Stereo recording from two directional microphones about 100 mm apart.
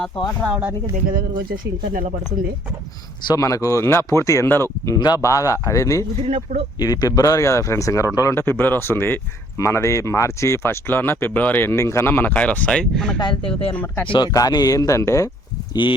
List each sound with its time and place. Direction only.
0.4 s speech: 5° right (ahead or behind)
3.3 s speech: 35° left (ahead or behind)
4.9 s speech: 40° left (ahead or behind)
6.2 s speech: 90° right
6.7 s speech: 40° left (ahead or behind)
8.4 s speech: 20° left (ahead or behind)
12.3 s speech: 15° left (ahead or behind)
13.1 s speech: 50° left (ahead or behind)
13.7 s speech: 15° left (ahead or behind)
14.3 s speech: 40° left (ahead or behind)
15.7 s speech: 55° left (ahead or behind)